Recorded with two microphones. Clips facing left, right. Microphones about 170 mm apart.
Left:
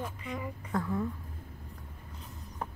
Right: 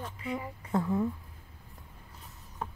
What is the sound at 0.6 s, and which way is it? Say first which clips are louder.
Speech: right 4 dB; 20° right (ahead or behind).